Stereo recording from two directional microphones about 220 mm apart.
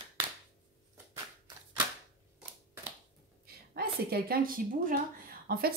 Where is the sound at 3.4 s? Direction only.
45° right (ahead or behind).